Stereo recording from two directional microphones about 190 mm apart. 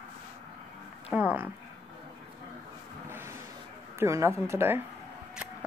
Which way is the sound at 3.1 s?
10° right (ahead or behind).